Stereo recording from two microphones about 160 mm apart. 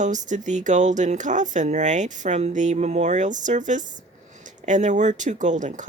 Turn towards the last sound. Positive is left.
turn(degrees=-50)  # may be behind; listen again after turning